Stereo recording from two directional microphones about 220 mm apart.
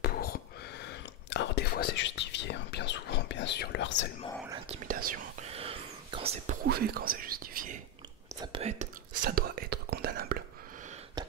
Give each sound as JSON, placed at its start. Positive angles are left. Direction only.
{"t": 0.0, "sound": "whispering", "side_deg": 45}
{"t": 4.6, "sound": "whispering", "side_deg": -40}
{"t": 5.5, "sound": "whispering", "side_deg": -25}
{"t": 6.6, "sound": "whispering", "side_deg": -45}
{"t": 8.4, "sound": "whispering", "side_deg": -25}